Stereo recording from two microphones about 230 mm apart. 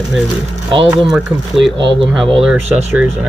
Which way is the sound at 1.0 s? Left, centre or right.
Centre.